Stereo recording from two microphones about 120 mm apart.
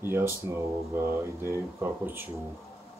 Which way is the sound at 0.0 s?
20° right (ahead or behind).